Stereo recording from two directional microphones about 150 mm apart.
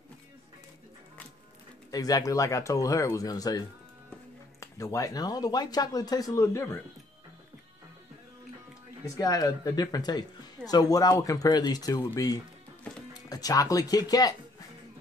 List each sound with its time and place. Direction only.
1.9 s speech: 25° left (ahead or behind)
9.0 s speech: 25° left (ahead or behind)
13.1 s speech: 25° left (ahead or behind)